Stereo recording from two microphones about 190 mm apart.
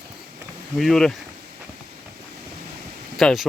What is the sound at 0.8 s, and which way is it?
Speech, centre (ahead or behind).